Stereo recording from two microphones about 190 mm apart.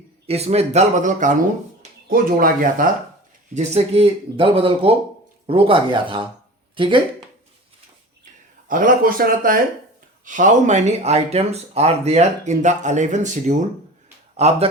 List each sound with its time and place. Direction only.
0.3 s speech: 35° right (ahead or behind)
3.5 s speech: 35° right (ahead or behind)
8.2 s speech: 45° right (ahead or behind)